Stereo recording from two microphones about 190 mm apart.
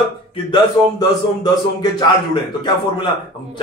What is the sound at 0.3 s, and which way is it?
A man's voice, 25° left (ahead or behind).